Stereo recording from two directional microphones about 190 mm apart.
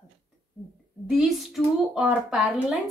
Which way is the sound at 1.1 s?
Centre (ahead or behind).